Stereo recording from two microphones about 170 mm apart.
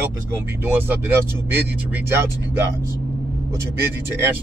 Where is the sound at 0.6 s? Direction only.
10° right (ahead or behind).